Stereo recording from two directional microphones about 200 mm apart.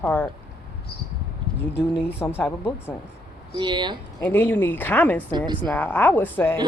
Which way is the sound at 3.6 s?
20° right (ahead or behind).